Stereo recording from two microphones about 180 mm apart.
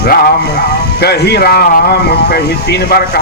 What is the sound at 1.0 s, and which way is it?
Speech, 60° left (ahead or behind).